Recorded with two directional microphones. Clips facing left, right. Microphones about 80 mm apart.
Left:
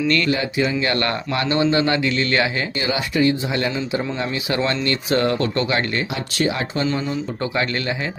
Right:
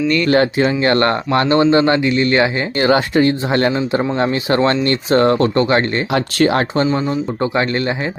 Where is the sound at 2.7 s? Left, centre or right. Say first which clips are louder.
Right 9 dB; right.